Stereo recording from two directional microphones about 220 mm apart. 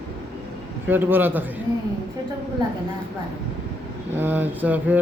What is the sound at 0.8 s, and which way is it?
Speech, 10° right (ahead or behind).